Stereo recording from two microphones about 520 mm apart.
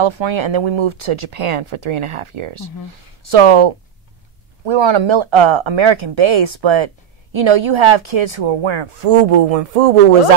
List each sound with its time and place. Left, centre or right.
0.0 s speech: right